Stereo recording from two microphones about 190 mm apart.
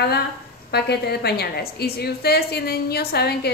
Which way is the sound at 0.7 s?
55° left (ahead or behind).